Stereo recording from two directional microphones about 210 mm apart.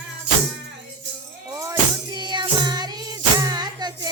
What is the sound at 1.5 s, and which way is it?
Music, 15° right (ahead or behind).